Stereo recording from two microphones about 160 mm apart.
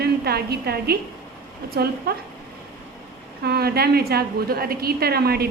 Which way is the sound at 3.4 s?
80° right.